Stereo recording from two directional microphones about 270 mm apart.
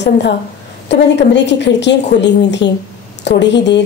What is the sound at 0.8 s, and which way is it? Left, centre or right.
A woman's voice, left.